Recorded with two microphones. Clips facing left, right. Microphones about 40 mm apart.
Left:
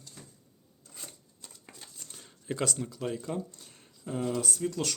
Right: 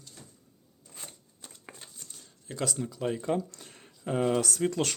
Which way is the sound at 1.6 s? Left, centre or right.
Right.